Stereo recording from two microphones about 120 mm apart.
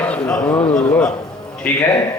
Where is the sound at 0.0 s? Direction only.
10° left (ahead or behind).